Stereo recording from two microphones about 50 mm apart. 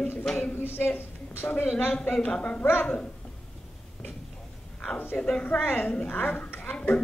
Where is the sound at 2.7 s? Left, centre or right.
Left.